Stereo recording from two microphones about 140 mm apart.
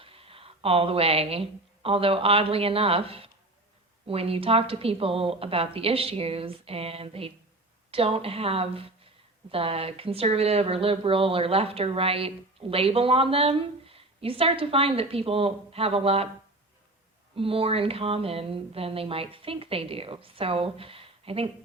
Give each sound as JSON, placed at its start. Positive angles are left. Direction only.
{"t": 0.0, "sound": "speech", "side_deg": -40}
{"t": 17.3, "sound": "speech", "side_deg": -40}